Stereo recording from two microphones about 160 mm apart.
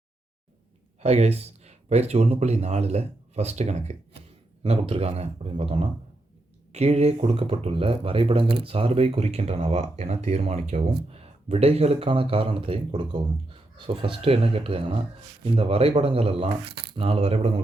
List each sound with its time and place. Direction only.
1.0 s speech: 40° right (ahead or behind)